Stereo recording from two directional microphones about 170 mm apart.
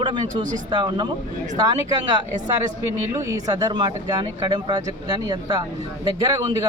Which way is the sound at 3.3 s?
20° right (ahead or behind).